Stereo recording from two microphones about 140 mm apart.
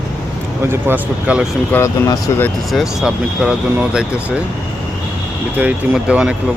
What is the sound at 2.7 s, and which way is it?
Speech, centre (ahead or behind).